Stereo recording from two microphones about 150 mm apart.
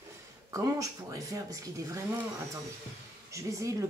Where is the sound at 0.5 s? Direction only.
20° right (ahead or behind).